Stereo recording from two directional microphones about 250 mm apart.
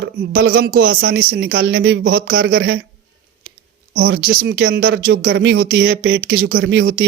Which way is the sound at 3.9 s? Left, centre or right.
Right.